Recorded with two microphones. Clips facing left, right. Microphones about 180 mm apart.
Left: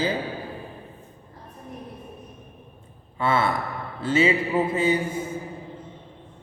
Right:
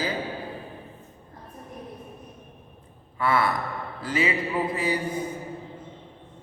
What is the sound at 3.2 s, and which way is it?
A man's voice, 25° left (ahead or behind).